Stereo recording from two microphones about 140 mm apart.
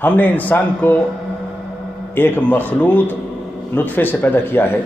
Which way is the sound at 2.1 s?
15° left (ahead or behind).